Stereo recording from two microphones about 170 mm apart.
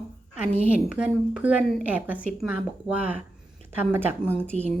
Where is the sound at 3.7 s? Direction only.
15° right (ahead or behind).